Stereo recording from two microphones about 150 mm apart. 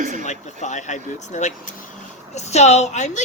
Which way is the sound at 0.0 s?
60° right (ahead or behind).